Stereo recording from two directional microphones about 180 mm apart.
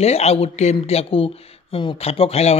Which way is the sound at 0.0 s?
35° left (ahead or behind).